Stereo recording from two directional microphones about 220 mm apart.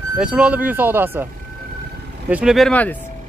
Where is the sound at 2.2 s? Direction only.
5° right (ahead or behind).